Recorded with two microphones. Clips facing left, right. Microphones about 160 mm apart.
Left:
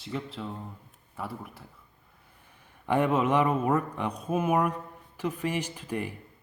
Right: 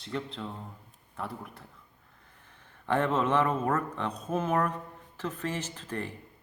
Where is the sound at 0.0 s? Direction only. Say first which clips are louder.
Left 1 dB; 5° left (ahead or behind).